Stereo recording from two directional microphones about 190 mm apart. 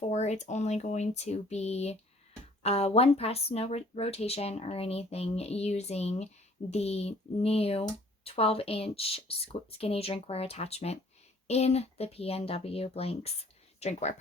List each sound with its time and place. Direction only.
0.0 s speech: 35° left (ahead or behind)